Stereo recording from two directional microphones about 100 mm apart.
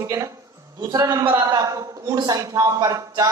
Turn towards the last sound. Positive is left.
turn(degrees=-35)  # may be behind; listen again after turning